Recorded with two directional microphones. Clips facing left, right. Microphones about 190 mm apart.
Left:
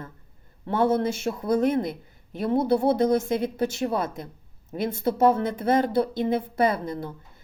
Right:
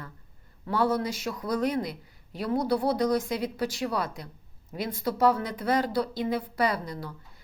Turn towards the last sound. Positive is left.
turn(degrees=25)  # may be behind; listen again after turning